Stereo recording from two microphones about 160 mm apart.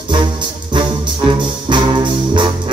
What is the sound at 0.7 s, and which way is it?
Brass instrument, 30° right (ahead or behind).